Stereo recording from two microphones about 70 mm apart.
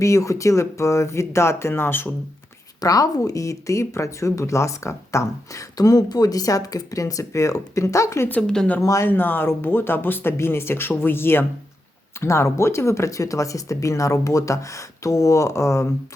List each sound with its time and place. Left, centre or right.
0.0 s speech: left
2.8 s speech: left
8.3 s speech: centre
8.8 s speech: left
9.0 s speech: left